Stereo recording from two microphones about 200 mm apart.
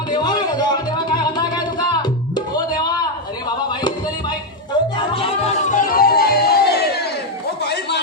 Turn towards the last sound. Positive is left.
turn(degrees=55)  # may be behind; listen again after turning